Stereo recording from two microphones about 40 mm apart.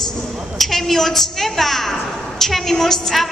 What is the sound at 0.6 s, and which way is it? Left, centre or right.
A woman's voice, centre.